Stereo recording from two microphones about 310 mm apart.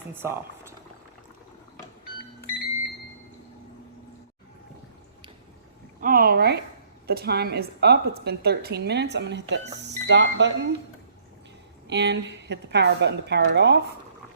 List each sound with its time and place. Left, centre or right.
0.1 s speech: centre
6.0 s a woman's voice: right
11.9 s a woman's voice: right